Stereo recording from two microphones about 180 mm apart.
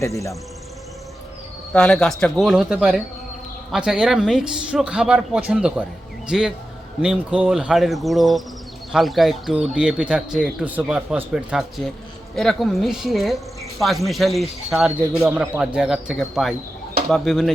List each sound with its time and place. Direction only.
0.0 s speech: 15° left (ahead or behind)
1.7 s speech: 5° left (ahead or behind)